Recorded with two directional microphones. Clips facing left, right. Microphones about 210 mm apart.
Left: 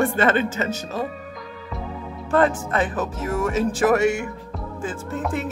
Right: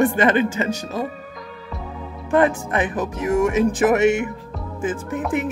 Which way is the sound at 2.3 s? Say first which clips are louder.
Right 2 dB; 15° right (ahead or behind).